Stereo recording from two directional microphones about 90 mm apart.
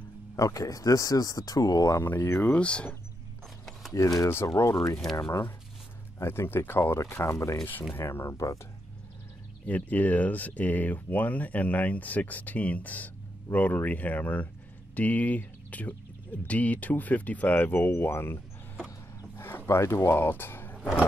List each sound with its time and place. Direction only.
0.4 s speech: 40° left (ahead or behind)
2.0 s speech: 25° left (ahead or behind)
2.5 s speech: 10° left (ahead or behind)
3.9 s speech: 35° left (ahead or behind)
6.1 s speech: 30° left (ahead or behind)
9.7 s speech: 20° left (ahead or behind)
18.9 s a sound: 25° left (ahead or behind)